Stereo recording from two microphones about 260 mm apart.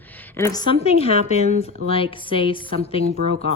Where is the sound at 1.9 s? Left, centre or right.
Left.